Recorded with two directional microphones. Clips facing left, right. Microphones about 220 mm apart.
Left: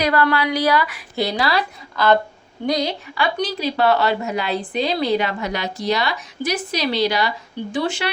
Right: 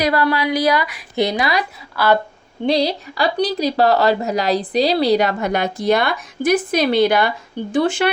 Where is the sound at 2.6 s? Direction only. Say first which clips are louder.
Right 4 dB; 30° right (ahead or behind).